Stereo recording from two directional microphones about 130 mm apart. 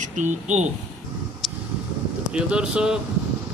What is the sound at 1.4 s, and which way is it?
Vehicle, centre (ahead or behind).